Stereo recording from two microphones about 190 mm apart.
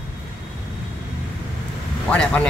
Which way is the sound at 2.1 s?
5° left (ahead or behind).